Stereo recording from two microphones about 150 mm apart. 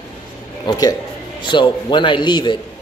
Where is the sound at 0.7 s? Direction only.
25° left (ahead or behind).